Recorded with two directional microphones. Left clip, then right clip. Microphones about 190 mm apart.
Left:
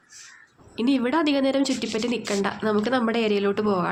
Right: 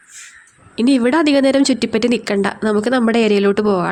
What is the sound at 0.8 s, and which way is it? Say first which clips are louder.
A woman's voice: right 8 dB; 50° right (ahead or behind).